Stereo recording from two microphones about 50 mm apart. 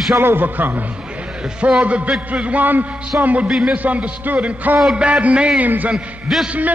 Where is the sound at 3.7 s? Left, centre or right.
Right.